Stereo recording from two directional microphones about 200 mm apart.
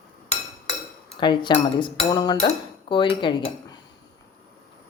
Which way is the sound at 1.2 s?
25° left (ahead or behind).